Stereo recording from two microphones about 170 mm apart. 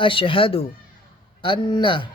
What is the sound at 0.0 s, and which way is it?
A man's voice, 30° left (ahead or behind).